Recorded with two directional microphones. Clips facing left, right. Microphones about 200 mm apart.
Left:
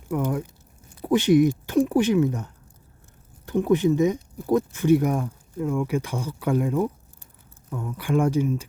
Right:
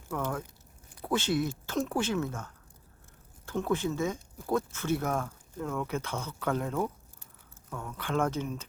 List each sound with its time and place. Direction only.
0.1 s speech: 15° left (ahead or behind)